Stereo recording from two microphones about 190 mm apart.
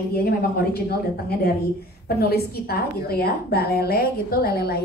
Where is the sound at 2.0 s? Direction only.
55° left (ahead or behind).